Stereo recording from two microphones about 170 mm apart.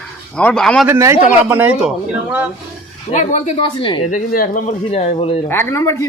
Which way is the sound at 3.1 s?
45° left (ahead or behind).